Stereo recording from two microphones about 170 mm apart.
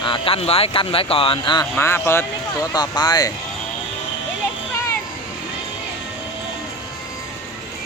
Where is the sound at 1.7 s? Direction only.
15° left (ahead or behind).